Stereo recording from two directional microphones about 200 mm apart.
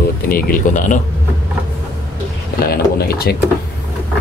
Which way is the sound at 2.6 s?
50° left (ahead or behind).